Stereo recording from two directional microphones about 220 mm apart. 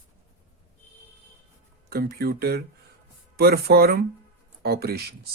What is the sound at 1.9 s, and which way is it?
Speech, 45° right (ahead or behind).